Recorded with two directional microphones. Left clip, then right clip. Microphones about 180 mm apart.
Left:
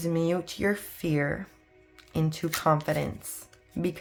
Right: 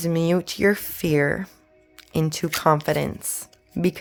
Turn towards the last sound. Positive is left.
turn(degrees=-45)  # may be behind; listen again after turning